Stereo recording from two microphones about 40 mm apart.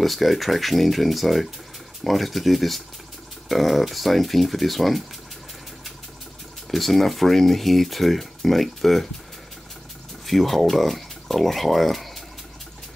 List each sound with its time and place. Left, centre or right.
0.0 s speech: centre
6.7 s speech: centre
10.2 s speech: centre